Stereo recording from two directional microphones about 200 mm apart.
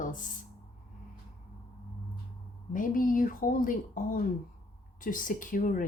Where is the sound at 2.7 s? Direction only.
45° left (ahead or behind).